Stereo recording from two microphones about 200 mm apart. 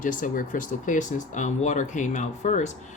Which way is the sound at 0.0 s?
40° left (ahead or behind).